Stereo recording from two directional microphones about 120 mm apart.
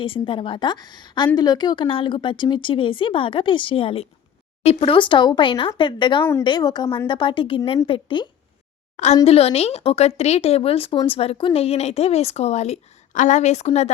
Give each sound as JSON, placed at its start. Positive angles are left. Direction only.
{"t": 0.0, "sound": "a woman's voice", "side_deg": 45}
{"t": 9.2, "sound": "a woman's voice", "side_deg": 55}